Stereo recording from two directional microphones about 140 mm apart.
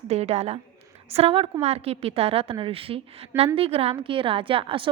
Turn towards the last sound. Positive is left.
turn(degrees=-40)  # may be behind; listen again after turning